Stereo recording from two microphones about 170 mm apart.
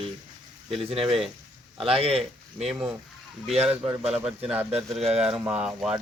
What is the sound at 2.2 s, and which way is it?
Speech, centre (ahead or behind).